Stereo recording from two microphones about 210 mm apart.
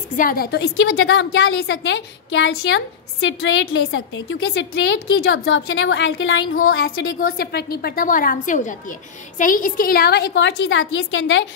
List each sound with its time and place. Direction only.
0.1 s a woman's voice: 40° left (ahead or behind); by 6.4 s 60° left (ahead or behind)
6.7 s a woman's voice: 50° left (ahead or behind); by 11.4 s 65° left (ahead or behind)